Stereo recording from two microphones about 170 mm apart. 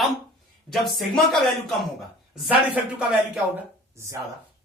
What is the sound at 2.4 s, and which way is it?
Speech, 5° right (ahead or behind).